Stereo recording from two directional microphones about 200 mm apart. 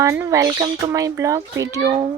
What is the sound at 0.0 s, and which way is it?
A child's voice, 15° right (ahead or behind).